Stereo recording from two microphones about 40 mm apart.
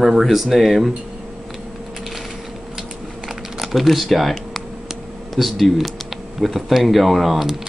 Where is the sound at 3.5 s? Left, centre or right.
Centre.